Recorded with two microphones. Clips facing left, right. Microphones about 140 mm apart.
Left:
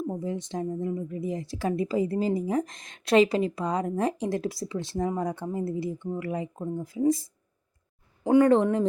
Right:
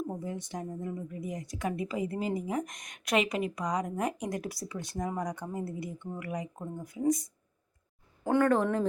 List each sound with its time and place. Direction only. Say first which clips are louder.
0.2 s a woman's voice: left 6 dB; 25° left (ahead or behind)
8.2 s a woman's voice: left 6 dB; 15° left (ahead or behind)